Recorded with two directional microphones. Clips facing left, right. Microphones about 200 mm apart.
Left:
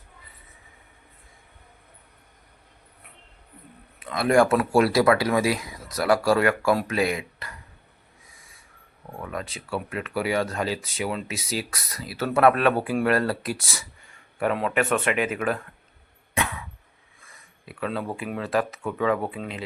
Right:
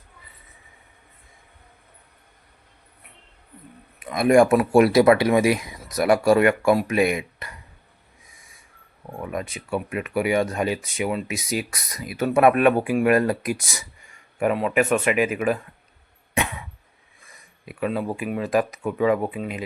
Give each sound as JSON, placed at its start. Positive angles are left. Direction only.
{"t": 4.0, "sound": "speech", "side_deg": -15}
{"t": 9.1, "sound": "speech", "side_deg": -15}
{"t": 16.3, "sound": "cough", "side_deg": -20}
{"t": 17.7, "sound": "speech", "side_deg": -15}